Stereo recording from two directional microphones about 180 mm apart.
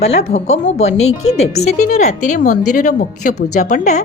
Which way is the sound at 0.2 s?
35° left (ahead or behind).